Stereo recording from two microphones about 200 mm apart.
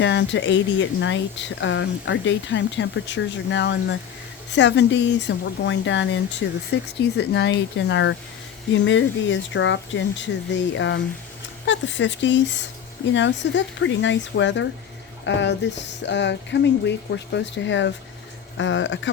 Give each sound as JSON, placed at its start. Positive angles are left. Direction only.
{"t": 0.0, "sound": "speech", "side_deg": 60}